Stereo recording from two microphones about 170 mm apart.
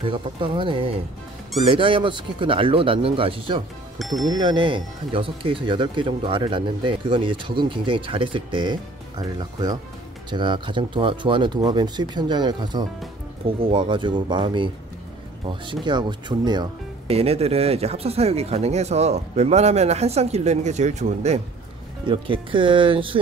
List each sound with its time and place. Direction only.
0.0 s speech: 30° right (ahead or behind)
4.0 s speech: centre (ahead or behind)
4.3 s speech: 25° right (ahead or behind)
17.1 s speech: 35° right (ahead or behind)
22.0 s speech: 30° right (ahead or behind)